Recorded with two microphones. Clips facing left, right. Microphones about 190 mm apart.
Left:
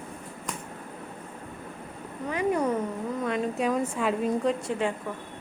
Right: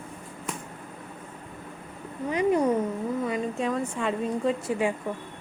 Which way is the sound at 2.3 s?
15° right (ahead or behind).